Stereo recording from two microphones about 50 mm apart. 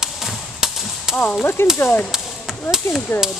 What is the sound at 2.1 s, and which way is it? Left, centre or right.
Chop, centre.